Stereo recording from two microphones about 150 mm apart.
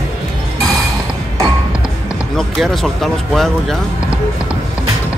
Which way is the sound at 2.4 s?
Centre (ahead or behind).